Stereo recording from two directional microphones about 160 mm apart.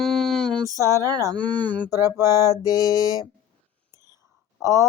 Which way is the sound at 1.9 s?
20° left (ahead or behind).